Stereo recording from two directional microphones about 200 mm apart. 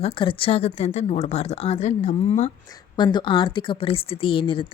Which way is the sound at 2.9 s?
20° left (ahead or behind).